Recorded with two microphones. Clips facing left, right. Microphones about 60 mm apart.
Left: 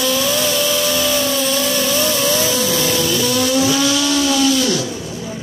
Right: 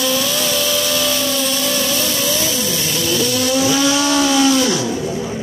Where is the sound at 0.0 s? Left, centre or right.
Centre.